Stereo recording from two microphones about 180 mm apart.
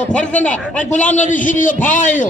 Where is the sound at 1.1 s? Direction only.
45° left (ahead or behind).